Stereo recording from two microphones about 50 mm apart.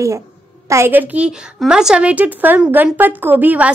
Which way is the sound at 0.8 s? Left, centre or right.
Right.